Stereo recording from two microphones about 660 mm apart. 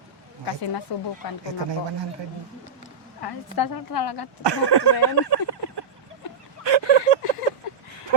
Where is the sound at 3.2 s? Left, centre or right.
Left.